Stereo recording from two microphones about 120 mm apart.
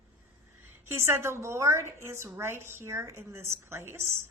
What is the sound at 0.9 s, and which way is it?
A woman's voice, 20° right (ahead or behind).